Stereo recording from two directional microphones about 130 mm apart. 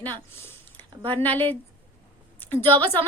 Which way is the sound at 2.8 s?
15° left (ahead or behind).